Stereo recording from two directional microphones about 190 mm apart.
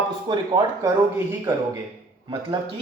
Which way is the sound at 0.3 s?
25° right (ahead or behind).